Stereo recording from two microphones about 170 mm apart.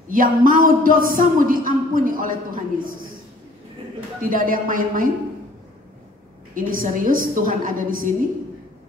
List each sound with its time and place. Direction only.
0.1 s a man's voice: 55° right (ahead or behind)
4.2 s a woman's voice: 55° right (ahead or behind)
6.5 s a woman's voice: 55° right (ahead or behind)